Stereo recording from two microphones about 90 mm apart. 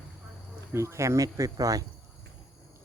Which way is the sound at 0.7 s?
30° right (ahead or behind).